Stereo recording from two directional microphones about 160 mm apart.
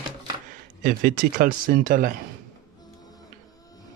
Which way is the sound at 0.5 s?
55° right (ahead or behind).